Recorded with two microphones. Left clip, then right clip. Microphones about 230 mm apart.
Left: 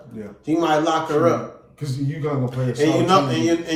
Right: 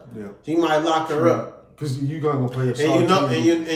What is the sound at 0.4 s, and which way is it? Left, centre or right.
Speech, centre.